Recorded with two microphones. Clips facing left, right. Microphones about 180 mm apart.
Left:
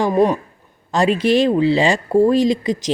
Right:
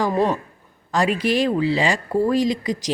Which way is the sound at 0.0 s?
15° left (ahead or behind).